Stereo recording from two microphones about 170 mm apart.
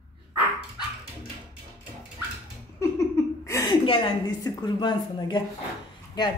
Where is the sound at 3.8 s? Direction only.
30° left (ahead or behind).